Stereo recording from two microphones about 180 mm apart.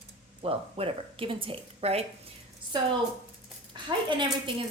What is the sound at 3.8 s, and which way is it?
Speech, 25° right (ahead or behind).